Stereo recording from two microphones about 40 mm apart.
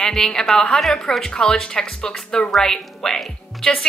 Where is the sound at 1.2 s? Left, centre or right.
Centre.